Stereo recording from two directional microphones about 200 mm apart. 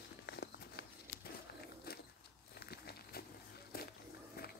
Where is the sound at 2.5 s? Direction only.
50° left (ahead or behind).